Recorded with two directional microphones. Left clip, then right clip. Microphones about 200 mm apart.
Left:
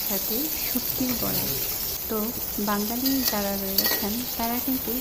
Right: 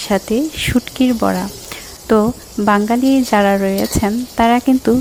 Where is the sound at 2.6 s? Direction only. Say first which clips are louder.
Right 14 dB; 40° right (ahead or behind).